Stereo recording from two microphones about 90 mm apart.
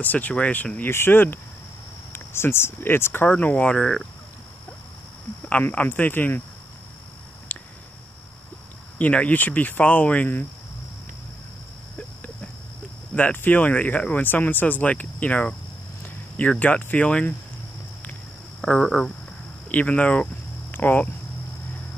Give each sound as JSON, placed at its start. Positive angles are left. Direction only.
{"t": 0.0, "sound": "speech", "side_deg": 20}
{"t": 5.5, "sound": "speech", "side_deg": 20}
{"t": 7.5, "sound": "a sound", "side_deg": 15}
{"t": 8.9, "sound": "speech", "side_deg": 15}
{"t": 13.1, "sound": "speech", "side_deg": 20}
{"t": 18.6, "sound": "speech", "side_deg": 10}